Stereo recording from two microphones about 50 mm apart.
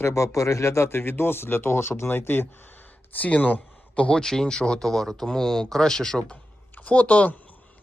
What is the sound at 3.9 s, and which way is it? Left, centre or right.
Speech, left.